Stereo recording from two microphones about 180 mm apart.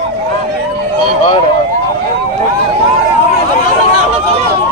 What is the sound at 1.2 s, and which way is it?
Speech, 30° left (ahead or behind).